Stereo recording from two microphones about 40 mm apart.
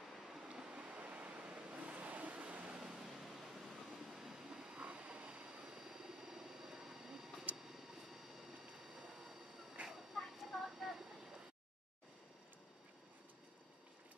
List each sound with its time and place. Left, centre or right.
0.1 s vehicle: centre
0.5 s vehicle: right
3.0 s waves: centre
4.1 s vehicle: centre; by 5.6 s right
5.6 s vehicle: centre
8.1 s train: centre
9.8 s a sound: centre